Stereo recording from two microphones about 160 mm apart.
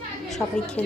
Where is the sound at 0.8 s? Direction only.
10° left (ahead or behind).